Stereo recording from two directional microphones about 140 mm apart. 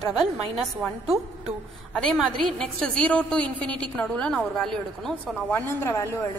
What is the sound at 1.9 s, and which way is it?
A woman's voice, 5° left (ahead or behind).